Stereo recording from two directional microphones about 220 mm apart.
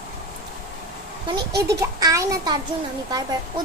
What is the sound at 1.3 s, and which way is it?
A child's voice, 15° right (ahead or behind).